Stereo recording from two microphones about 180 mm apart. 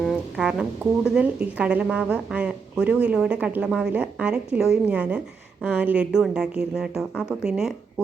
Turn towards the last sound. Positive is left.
turn(degrees=-5)  # may be behind; listen again after turning